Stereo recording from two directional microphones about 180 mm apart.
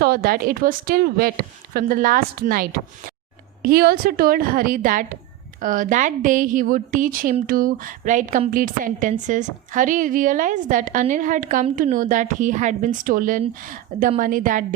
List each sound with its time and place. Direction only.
0.0 s a woman's voice: 55° right (ahead or behind)